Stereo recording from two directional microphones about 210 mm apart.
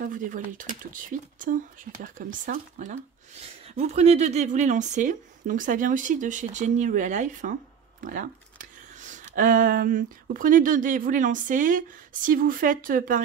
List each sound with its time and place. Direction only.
0.0 s a woman's voice: 40° right (ahead or behind)